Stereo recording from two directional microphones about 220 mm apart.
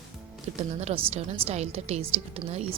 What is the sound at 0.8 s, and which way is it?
A woman's voice, 25° right (ahead or behind).